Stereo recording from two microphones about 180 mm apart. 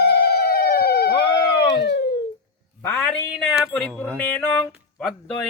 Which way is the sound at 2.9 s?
5° left (ahead or behind).